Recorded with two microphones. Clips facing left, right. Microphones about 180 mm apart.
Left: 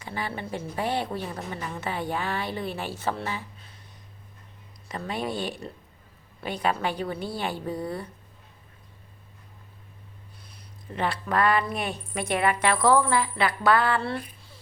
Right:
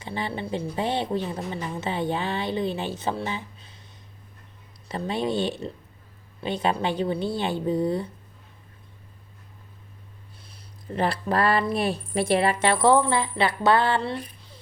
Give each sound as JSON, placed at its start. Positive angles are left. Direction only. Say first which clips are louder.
{"t": 0.0, "sound": "a woman's voice", "louder": "right 3 dB", "side_deg": -25}
{"t": 4.9, "sound": "a woman's voice", "louder": "right 4 dB", "side_deg": -30}
{"t": 10.9, "sound": "a woman's voice", "louder": "right 2 dB", "side_deg": -35}
{"t": 14.0, "sound": "a sound", "louder": "right 1 dB", "side_deg": -20}